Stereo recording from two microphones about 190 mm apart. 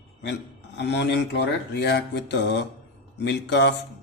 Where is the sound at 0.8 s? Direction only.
65° left (ahead or behind).